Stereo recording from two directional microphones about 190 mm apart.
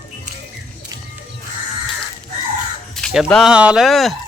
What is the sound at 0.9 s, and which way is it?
Music, 20° right (ahead or behind).